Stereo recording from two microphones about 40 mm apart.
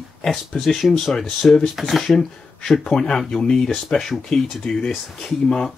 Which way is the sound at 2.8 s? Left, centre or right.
Centre.